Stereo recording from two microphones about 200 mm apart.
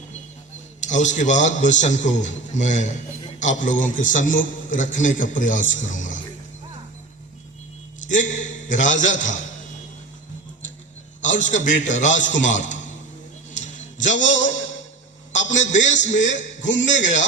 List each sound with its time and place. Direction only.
0.8 s a man's voice: 35° left (ahead or behind)
8.0 s a man's voice: 40° left (ahead or behind)
11.2 s a man's voice: 40° left (ahead or behind)
13.5 s a sound: 40° left (ahead or behind)
15.5 s a man's voice: 35° left (ahead or behind)
16.1 s a man's voice: 65° left (ahead or behind)
16.4 s a man's voice: 40° left (ahead or behind)